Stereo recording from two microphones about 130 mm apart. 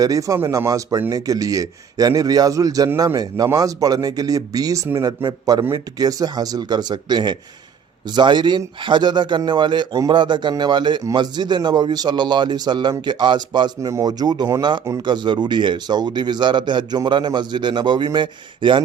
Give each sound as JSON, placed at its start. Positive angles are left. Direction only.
{"t": 0.0, "sound": "a man's voice", "side_deg": -25}